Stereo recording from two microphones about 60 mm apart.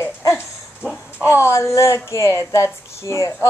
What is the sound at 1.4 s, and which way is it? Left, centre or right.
Speech, left.